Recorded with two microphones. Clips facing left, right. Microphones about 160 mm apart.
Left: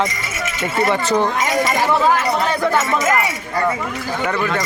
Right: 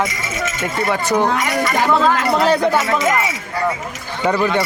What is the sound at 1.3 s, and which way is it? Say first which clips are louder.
Speech: left 1 dB; 65° right (ahead or behind).